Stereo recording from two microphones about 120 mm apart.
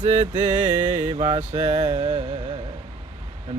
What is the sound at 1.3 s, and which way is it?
Mantra, 65° right (ahead or behind).